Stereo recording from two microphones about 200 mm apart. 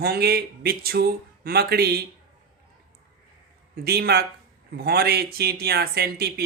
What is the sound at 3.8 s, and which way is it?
Speech, 50° right (ahead or behind).